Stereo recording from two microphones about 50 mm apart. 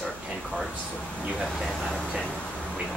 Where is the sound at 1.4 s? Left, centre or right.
Centre.